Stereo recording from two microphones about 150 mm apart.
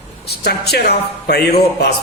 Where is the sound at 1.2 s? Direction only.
90° left.